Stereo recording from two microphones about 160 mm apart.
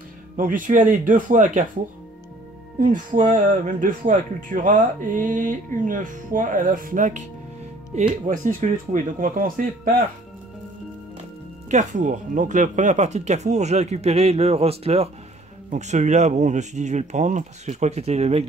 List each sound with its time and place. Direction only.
0.4 s speech: 55° right (ahead or behind)
2.8 s speech: 55° right (ahead or behind)
11.7 s speech: 50° right (ahead or behind)